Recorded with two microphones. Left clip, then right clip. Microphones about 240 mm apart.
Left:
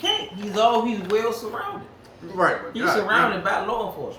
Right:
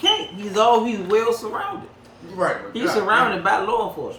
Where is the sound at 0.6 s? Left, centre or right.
Centre.